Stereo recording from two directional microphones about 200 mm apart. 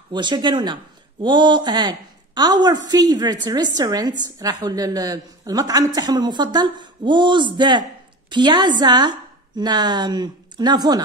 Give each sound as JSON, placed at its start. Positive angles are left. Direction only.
{"t": 0.1, "sound": "a woman's voice", "side_deg": -25}